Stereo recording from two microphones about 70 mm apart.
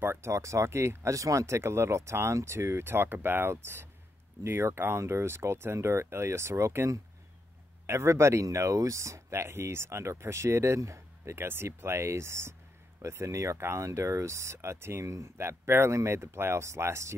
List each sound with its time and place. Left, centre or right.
0.0 s speech: right